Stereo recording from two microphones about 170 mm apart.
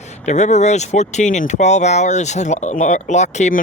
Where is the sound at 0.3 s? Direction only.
45° left (ahead or behind).